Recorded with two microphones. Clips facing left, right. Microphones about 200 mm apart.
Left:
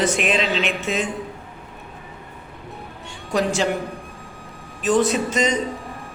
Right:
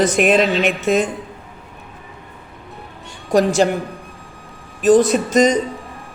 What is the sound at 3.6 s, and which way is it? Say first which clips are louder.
Speech: right 6 dB; 45° right (ahead or behind).